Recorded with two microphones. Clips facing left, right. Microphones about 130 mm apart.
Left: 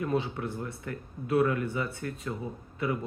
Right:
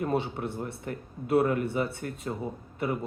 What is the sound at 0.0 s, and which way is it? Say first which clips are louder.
Speech: right 1 dB; 30° right (ahead or behind).